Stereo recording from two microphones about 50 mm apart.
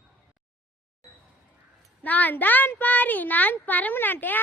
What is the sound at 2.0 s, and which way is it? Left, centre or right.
A woman's voice, left.